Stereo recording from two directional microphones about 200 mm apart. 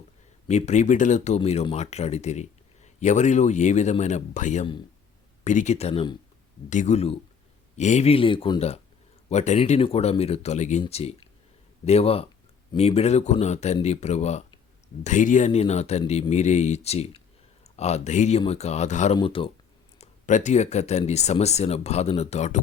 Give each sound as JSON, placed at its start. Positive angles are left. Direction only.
{"t": 0.4, "sound": "speech", "side_deg": 35}
{"t": 19.1, "sound": "speech", "side_deg": 25}
{"t": 20.0, "sound": "speech", "side_deg": 35}